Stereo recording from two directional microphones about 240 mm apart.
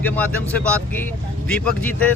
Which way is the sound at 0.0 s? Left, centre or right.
Centre.